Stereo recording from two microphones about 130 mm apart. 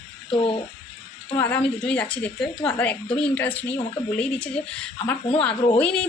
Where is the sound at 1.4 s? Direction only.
10° left (ahead or behind).